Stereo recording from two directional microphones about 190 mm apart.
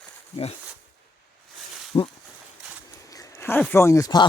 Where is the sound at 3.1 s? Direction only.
15° left (ahead or behind).